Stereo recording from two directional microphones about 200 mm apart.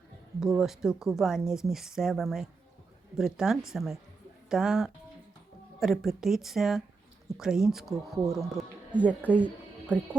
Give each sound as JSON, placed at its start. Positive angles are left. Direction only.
{"t": 0.3, "sound": "speech", "side_deg": 0}
{"t": 8.2, "sound": "speech", "side_deg": -15}